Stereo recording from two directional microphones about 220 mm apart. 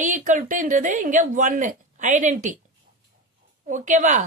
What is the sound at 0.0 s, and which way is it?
A woman's voice, 35° right (ahead or behind).